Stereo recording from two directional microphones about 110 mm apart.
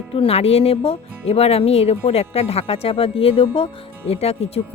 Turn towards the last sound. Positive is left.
turn(degrees=65)  # may be behind; listen again after turning